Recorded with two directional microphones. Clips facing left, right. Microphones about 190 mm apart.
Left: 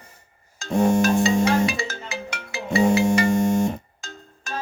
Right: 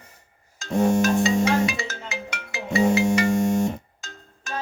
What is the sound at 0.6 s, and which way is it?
Music, 30° left (ahead or behind).